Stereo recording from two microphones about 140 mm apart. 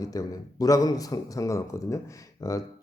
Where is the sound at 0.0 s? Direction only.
25° left (ahead or behind).